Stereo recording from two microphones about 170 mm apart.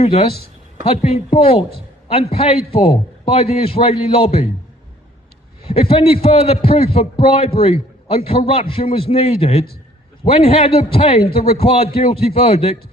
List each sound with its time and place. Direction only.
0.0 s a man's voice: 35° left (ahead or behind)
5.7 s a man's voice: 35° left (ahead or behind)